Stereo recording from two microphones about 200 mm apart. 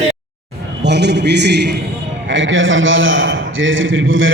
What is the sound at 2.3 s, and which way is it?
A man's voice, 70° right (ahead or behind).